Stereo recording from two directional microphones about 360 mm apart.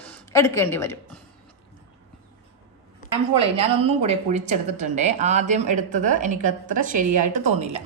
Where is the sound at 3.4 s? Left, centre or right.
Centre.